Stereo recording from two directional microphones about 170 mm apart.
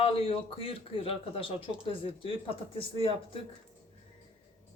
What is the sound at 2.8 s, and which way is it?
Speech, 30° left (ahead or behind).